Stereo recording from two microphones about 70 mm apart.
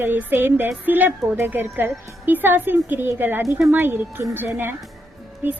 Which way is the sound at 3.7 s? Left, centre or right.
Right.